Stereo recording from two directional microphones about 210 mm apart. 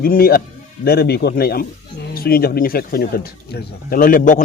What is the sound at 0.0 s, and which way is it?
Speech, 45° left (ahead or behind).